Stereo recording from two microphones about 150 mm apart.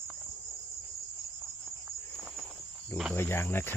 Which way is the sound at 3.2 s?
15° left (ahead or behind).